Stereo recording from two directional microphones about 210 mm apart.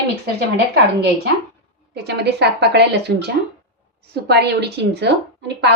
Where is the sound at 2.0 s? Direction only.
50° right (ahead or behind).